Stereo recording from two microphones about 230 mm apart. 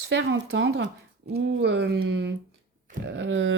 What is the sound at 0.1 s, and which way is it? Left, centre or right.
A woman's voice, right.